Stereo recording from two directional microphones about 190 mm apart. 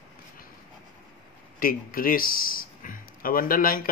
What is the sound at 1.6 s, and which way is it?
Speech, 50° left (ahead or behind).